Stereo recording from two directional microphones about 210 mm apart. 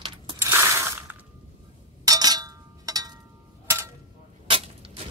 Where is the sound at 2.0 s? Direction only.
20° right (ahead or behind).